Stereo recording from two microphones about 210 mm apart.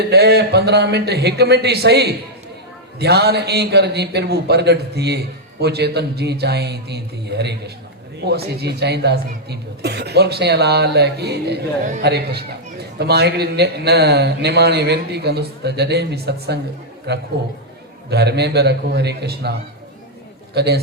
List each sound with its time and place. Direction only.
0.0 s a man's voice: 50° right (ahead or behind)